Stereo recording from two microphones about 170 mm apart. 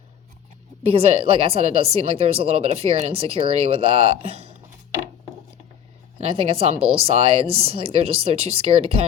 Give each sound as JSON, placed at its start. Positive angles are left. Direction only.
{"t": 0.8, "sound": "a woman's voice", "side_deg": -35}
{"t": 6.1, "sound": "a woman's voice", "side_deg": -35}